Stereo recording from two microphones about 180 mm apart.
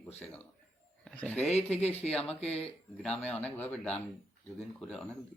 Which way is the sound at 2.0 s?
5° left (ahead or behind).